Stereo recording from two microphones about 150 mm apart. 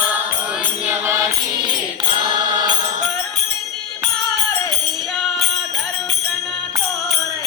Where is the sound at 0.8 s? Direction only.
15° right (ahead or behind).